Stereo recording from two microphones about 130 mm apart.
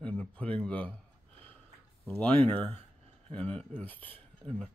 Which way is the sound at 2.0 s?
10° left (ahead or behind).